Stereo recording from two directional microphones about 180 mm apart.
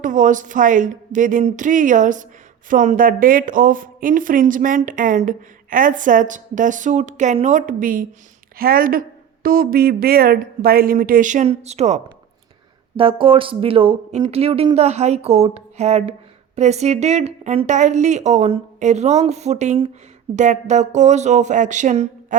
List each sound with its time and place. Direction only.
0.0 s a woman's voice: 45° right (ahead or behind)
13.0 s a woman's voice: 30° right (ahead or behind)